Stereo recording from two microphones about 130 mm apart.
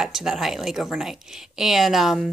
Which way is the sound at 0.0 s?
5° right (ahead or behind).